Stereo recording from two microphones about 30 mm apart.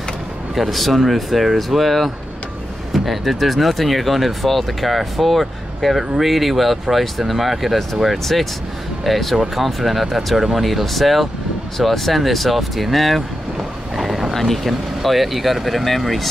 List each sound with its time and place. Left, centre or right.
0.7 s speech: centre
13.6 s vehicle: centre
14.3 s speech: centre